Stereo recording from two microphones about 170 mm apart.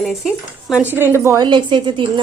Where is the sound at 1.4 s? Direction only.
25° right (ahead or behind).